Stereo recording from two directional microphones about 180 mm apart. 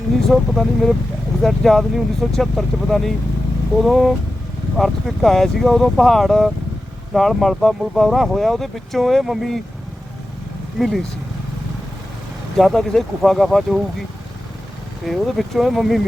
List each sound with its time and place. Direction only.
0.3 s speech: centre (ahead or behind)
10.8 s speech: centre (ahead or behind)
12.5 s speech: centre (ahead or behind)
15.0 s speech: centre (ahead or behind)